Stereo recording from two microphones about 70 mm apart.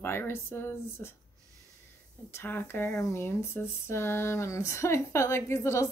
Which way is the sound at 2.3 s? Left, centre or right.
Left.